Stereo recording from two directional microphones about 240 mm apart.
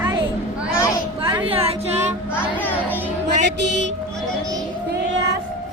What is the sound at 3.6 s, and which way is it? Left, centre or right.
Music, right.